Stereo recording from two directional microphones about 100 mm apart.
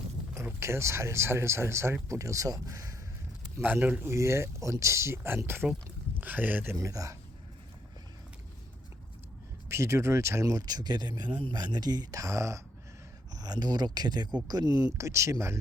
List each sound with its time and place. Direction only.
0.6 s speech: 30° right (ahead or behind)
3.6 s speech: 20° right (ahead or behind)
6.7 s speech: 35° right (ahead or behind)
9.6 s speech: 25° right (ahead or behind)